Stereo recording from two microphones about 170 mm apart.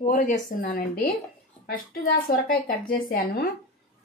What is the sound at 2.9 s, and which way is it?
Speech, 55° left (ahead or behind).